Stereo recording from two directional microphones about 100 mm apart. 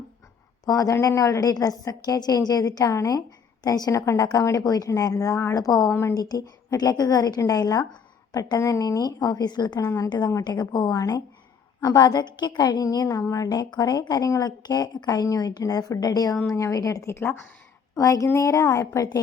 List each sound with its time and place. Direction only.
0.6 s a woman's voice: 35° left (ahead or behind)
5.9 s a woman's voice: 25° left (ahead or behind)
6.1 s a woman's voice: 40° left (ahead or behind)